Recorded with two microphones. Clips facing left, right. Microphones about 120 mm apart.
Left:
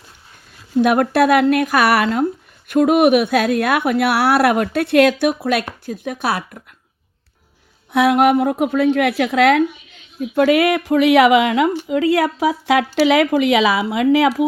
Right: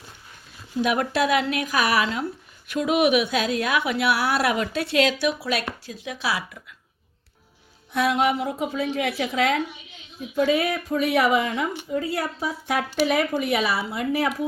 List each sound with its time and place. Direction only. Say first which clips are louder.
0.8 s a woman's voice: left 8 dB; 55° left (ahead or behind)
7.9 s a woman's voice: left 8 dB; 60° left (ahead or behind); by 14.4 s 90° left